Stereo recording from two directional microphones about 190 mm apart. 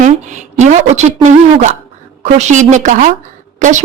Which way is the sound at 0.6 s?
40° right (ahead or behind).